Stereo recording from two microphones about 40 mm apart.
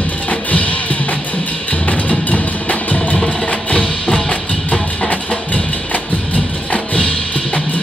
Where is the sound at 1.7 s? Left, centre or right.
Left.